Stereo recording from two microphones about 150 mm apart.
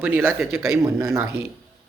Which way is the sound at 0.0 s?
15° right (ahead or behind).